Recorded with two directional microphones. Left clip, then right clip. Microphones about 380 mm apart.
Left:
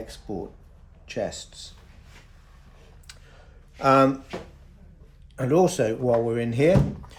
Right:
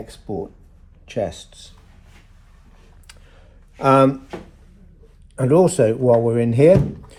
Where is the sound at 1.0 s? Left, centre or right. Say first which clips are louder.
Right 5 dB; centre.